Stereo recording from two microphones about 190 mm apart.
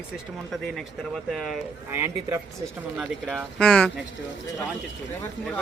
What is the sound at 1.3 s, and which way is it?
Speech, centre (ahead or behind).